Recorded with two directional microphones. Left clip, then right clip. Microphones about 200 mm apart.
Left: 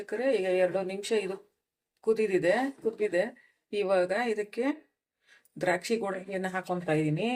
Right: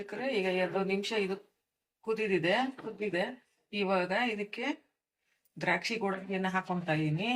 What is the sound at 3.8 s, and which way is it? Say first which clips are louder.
Speech: left 3 dB; 60° left (ahead or behind).